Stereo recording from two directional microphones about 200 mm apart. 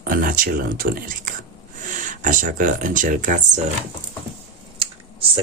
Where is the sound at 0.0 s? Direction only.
45° right (ahead or behind).